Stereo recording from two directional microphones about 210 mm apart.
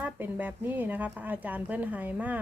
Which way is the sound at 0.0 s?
10° right (ahead or behind).